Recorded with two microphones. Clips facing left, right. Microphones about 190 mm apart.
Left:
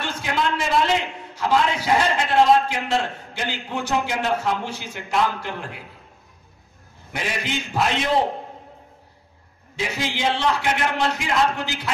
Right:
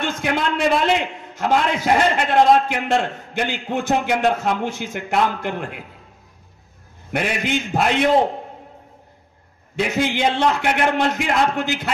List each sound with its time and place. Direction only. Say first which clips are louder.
0.0 s a man's voice: right 3 dB; 55° right (ahead or behind)
7.1 s a man's voice: right 6 dB; 60° right (ahead or behind)
9.8 s a man's voice: right 6 dB; 55° right (ahead or behind)